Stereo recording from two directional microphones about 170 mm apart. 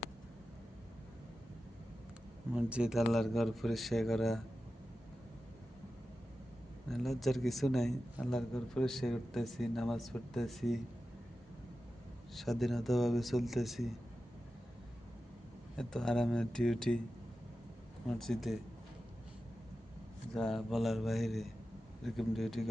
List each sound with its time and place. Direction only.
2.6 s a man's voice: 5° right (ahead or behind)
6.9 s a man's voice: centre (ahead or behind)
12.3 s a man's voice: centre (ahead or behind)
15.7 s a man's voice: 5° left (ahead or behind)
18.2 s a man's voice: centre (ahead or behind)
20.3 s a man's voice: centre (ahead or behind)